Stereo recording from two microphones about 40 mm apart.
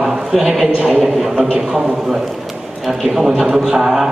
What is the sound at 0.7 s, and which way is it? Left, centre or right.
Speech, right.